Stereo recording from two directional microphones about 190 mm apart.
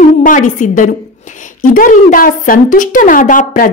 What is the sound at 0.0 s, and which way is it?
A woman's voice, 45° left (ahead or behind).